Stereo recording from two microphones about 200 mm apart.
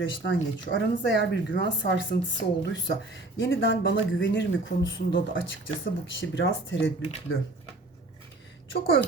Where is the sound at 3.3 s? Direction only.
70° left (ahead or behind).